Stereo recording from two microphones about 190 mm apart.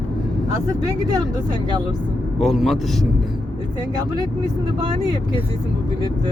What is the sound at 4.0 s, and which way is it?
Speech, 20° right (ahead or behind).